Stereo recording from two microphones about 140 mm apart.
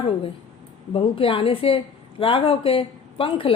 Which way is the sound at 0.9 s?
40° left (ahead or behind).